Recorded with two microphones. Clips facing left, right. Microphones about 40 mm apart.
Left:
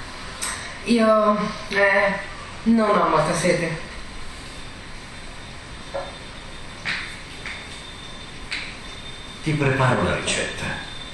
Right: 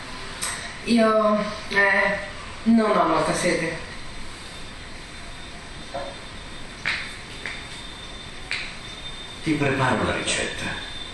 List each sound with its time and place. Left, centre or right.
0.5 s a sound: centre
1.3 s a woman's voice: centre
5.9 s vehicle: left
9.4 s speech: centre